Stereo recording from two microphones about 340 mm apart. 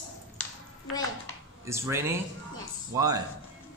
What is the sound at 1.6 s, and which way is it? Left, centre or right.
Music, centre.